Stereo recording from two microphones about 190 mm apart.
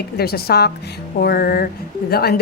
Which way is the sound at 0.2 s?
55° left (ahead or behind).